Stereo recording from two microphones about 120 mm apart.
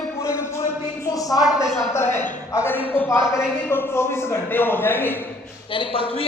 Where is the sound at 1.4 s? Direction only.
5° right (ahead or behind).